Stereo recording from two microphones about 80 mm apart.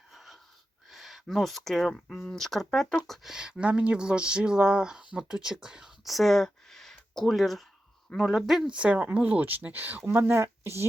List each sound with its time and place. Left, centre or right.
0.1 s wheeze: centre
0.9 s speech: centre; by 10.8 s right